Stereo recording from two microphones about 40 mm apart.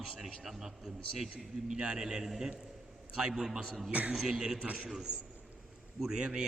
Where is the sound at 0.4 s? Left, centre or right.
Centre.